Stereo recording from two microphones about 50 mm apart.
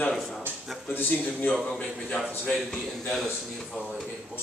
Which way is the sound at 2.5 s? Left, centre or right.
Centre.